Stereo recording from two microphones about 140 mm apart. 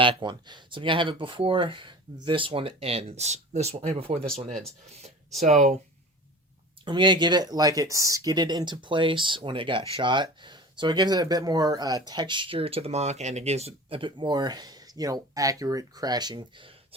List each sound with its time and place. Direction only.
0.0 s speech: 35° right (ahead or behind)
5.4 s speech: 55° right (ahead or behind)
6.8 s speech: 35° right (ahead or behind)